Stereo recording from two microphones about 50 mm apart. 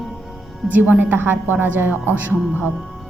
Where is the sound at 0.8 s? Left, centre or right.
Right.